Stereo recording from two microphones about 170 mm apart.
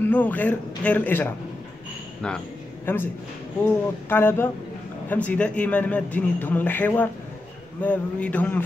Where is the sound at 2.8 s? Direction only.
10° left (ahead or behind).